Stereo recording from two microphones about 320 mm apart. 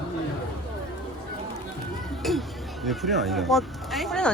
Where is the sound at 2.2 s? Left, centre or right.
Centre.